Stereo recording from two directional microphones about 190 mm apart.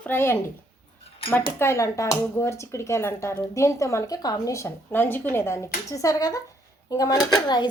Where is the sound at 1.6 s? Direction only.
15° left (ahead or behind).